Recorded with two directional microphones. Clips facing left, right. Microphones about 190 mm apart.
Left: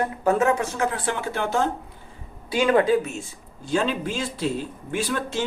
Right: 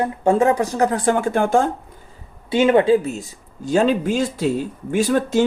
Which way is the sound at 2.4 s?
25° right (ahead or behind).